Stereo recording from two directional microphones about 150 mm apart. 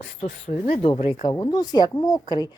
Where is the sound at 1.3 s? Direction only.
25° left (ahead or behind).